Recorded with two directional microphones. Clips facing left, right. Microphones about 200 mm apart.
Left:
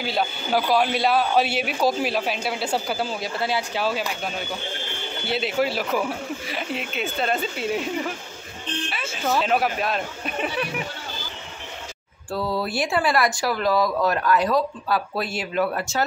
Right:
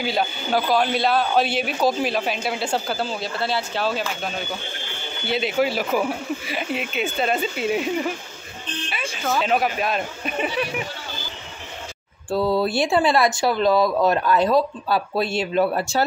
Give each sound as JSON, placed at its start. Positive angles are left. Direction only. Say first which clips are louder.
{"t": 0.0, "sound": "speech", "louder": "right 2 dB", "side_deg": 0}
{"t": 12.3, "sound": "speech", "louder": "right 5 dB", "side_deg": -25}